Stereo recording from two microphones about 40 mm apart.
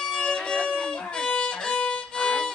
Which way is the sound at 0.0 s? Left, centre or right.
Centre.